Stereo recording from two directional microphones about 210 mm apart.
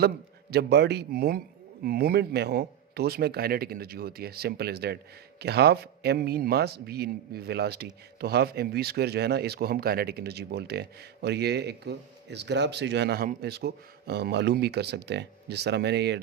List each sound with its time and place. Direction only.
0.5 s speech: 50° right (ahead or behind)